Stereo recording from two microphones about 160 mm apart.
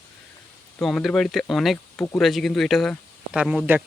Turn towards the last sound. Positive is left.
turn(degrees=-10)  # may be behind; listen again after turning